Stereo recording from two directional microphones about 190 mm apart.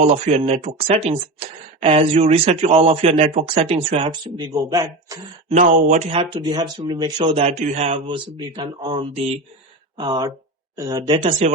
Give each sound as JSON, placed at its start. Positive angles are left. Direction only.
{"t": 0.0, "sound": "speech", "side_deg": -35}
{"t": 5.5, "sound": "speech", "side_deg": -40}